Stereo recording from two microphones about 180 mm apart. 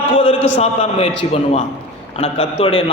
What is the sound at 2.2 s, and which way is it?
Speech, 30° left (ahead or behind).